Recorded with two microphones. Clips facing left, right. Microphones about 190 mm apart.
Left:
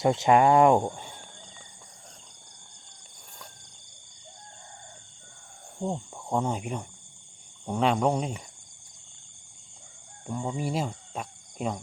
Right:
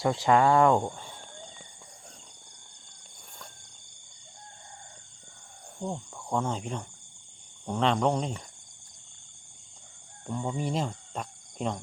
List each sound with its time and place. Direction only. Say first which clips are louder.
0.0 s speech: left 2 dB; 20° left (ahead or behind)
5.8 s speech: left 3 dB; 20° left (ahead or behind)
10.2 s speech: even; 10° left (ahead or behind)